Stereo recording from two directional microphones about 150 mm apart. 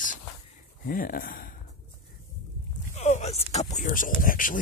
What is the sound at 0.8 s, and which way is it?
Speech, 70° left (ahead or behind).